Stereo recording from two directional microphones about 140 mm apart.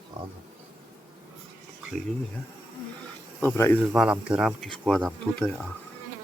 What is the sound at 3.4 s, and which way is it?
Speech, 15° left (ahead or behind).